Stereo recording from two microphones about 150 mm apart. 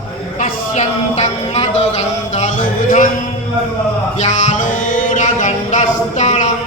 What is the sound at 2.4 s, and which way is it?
Music, 55° left (ahead or behind).